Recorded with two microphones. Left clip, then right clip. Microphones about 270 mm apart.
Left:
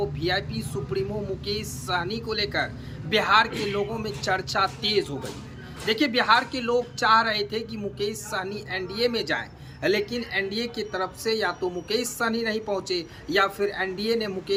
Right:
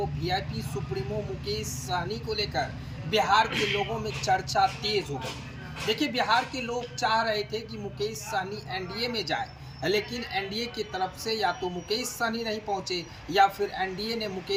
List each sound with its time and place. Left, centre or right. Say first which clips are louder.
0.2 s a woman's voice: left 4 dB; centre
3.5 s a man's voice: even; centre
4.0 s a woman's voice: even; centre